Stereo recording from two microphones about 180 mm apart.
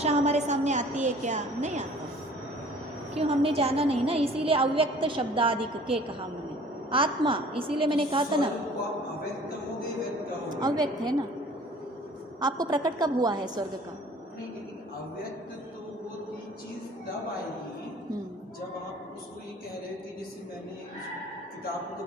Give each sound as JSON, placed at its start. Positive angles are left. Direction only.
{"t": 0.0, "sound": "a woman's voice", "side_deg": -35}
{"t": 3.2, "sound": "a woman's voice", "side_deg": -30}
{"t": 10.6, "sound": "a woman's voice", "side_deg": -20}
{"t": 12.4, "sound": "a woman's voice", "side_deg": -25}